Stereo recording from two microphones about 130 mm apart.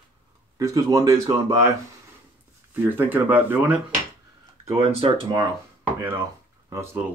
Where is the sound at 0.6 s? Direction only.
25° right (ahead or behind).